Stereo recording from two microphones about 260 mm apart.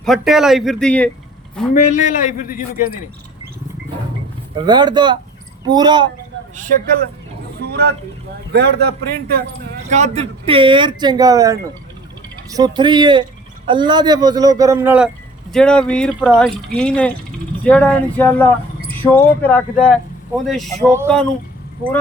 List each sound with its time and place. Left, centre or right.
0.0 s speech: centre
1.7 s a man's voice: left
4.5 s speech: centre
6.6 s a man's voice: right
9.9 s speech: right; by 20.8 s centre
20.8 s speech: centre